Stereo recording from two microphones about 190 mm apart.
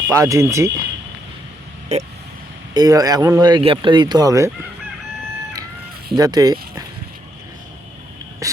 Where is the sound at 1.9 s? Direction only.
35° right (ahead or behind).